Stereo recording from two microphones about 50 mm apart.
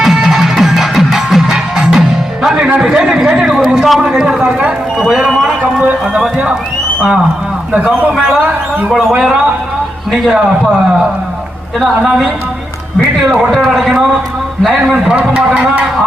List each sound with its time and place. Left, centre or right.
0.0 s music: centre
2.8 s a man's voice: centre
4.9 s a sound: centre
5.8 s a sound: right
11.8 s a man's voice: centre
14.8 s a man's voice: centre